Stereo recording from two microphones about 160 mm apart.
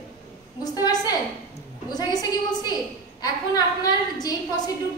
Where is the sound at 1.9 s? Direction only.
25° left (ahead or behind).